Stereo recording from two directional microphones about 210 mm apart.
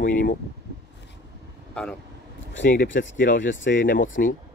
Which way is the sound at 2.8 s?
60° left (ahead or behind).